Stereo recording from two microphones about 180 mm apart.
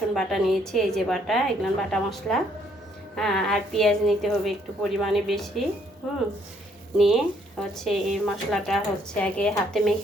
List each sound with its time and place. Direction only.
0.1 s a woman's voice: centre (ahead or behind)
6.9 s a woman's voice: centre (ahead or behind)